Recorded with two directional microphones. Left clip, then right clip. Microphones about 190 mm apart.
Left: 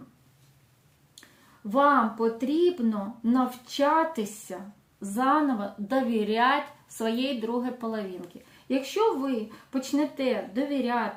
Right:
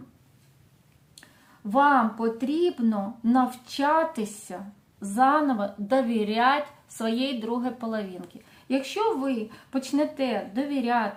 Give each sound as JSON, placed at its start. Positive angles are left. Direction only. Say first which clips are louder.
{"t": 1.7, "sound": "speech", "louder": "right 1 dB", "side_deg": -30}